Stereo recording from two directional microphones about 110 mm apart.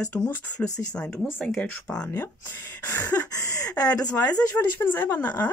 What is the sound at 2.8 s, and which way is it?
Speech, 20° left (ahead or behind).